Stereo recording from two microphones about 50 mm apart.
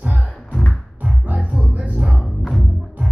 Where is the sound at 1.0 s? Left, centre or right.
Right.